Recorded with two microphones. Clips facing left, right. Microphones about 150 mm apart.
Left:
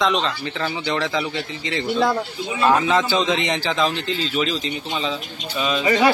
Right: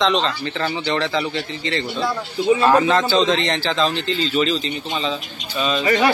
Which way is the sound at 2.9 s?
15° left (ahead or behind).